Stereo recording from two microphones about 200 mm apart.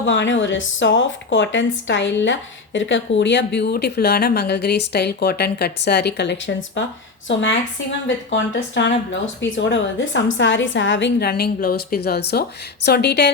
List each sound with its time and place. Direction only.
0.0 s speech: 65° left (ahead or behind)